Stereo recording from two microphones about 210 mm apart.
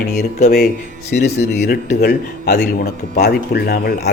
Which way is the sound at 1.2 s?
50° left (ahead or behind).